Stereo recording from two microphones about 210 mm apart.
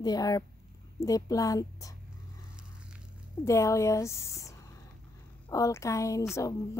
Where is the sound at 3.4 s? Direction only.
15° left (ahead or behind).